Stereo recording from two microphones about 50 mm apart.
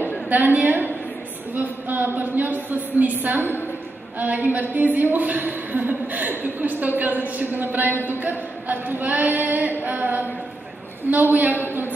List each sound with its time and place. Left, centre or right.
0.3 s a woman's voice: right